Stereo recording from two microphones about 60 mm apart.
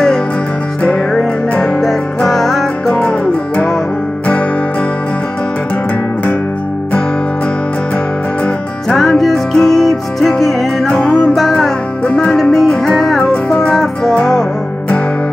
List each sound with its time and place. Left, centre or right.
1.8 s music: centre
3.0 s music: centre
8.8 s music: centre
12.0 s music: centre
12.4 s music: centre